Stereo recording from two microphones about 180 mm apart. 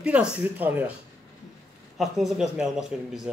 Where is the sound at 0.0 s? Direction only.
5° right (ahead or behind).